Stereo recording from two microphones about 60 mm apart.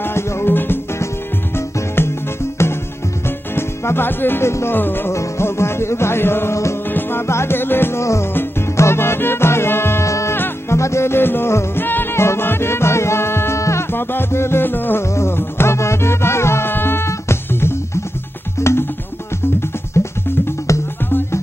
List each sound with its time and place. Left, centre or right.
0.0 s music: left
4.7 s music: left
5.1 s music: left
6.9 s music: left
8.0 s music: left
8.3 s music: left
10.0 s music: left
10.3 s music: left
10.8 s music: left
13.9 s music: left